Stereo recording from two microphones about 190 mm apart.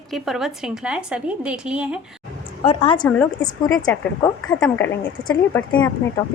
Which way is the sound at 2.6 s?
30° left (ahead or behind).